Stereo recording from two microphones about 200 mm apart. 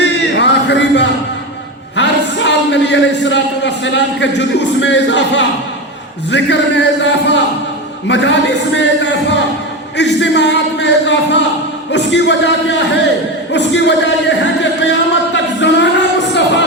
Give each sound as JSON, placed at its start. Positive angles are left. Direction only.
{"t": 0.0, "sound": "a sound", "side_deg": 60}
{"t": 2.0, "sound": "a man's voice", "side_deg": 60}
{"t": 10.0, "sound": "speech", "side_deg": 60}